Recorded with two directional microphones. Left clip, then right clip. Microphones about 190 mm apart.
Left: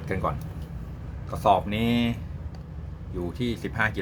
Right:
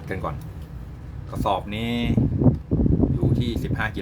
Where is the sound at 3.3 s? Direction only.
5° left (ahead or behind).